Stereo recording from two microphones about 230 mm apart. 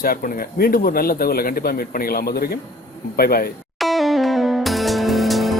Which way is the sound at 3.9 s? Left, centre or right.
Centre.